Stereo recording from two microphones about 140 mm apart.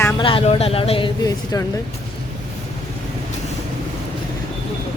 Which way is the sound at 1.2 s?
25° left (ahead or behind).